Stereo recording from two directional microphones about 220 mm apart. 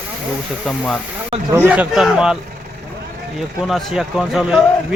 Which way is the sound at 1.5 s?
10° right (ahead or behind).